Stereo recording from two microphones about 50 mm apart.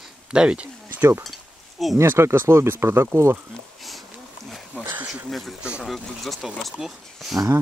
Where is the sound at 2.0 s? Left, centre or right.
Right.